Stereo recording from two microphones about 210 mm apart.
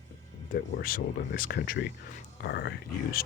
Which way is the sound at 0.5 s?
45° left (ahead or behind).